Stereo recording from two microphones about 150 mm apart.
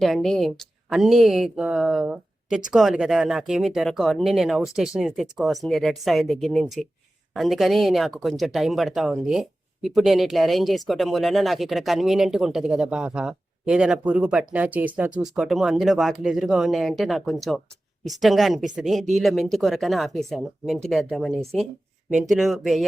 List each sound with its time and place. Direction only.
0.0 s speech: centre (ahead or behind)